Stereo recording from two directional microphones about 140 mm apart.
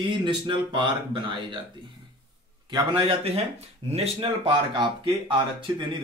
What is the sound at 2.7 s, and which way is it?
Speech, 35° right (ahead or behind).